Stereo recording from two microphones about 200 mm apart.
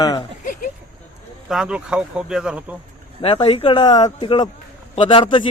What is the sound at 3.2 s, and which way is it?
A man's voice, 25° left (ahead or behind).